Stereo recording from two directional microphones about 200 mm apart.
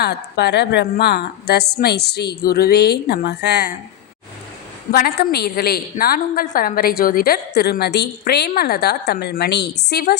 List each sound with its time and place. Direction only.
0.0 s a woman's voice: 55° left (ahead or behind)
4.9 s a woman's voice: 50° left (ahead or behind)